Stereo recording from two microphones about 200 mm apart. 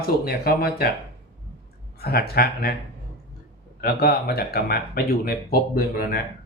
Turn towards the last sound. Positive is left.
turn(degrees=50)  # may be behind; listen again after turning